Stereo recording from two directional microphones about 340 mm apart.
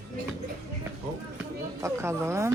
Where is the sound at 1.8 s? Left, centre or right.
Centre.